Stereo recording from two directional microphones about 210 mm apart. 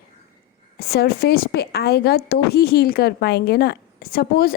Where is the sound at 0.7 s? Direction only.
50° left (ahead or behind).